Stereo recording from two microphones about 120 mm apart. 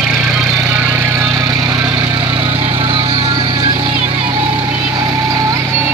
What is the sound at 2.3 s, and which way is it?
Vehicle, 45° right (ahead or behind).